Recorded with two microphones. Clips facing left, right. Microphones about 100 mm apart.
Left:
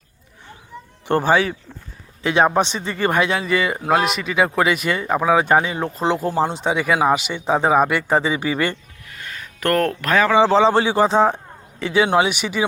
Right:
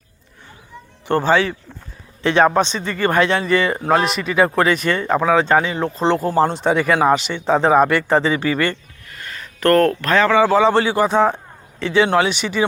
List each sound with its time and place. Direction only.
1.0 s speech: 15° left (ahead or behind)
9.0 s a sound: centre (ahead or behind)
10.4 s speech: 20° left (ahead or behind); by 12.6 s 5° left (ahead or behind)